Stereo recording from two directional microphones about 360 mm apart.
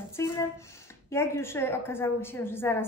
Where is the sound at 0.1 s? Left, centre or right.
Centre.